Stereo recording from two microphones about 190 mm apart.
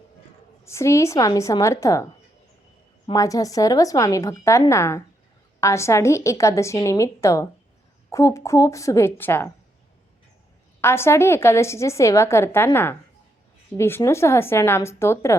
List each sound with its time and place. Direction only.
0.6 s a woman's voice: 15° left (ahead or behind)
3.1 s a woman's voice: 20° left (ahead or behind)
10.8 s a woman's voice: 15° left (ahead or behind)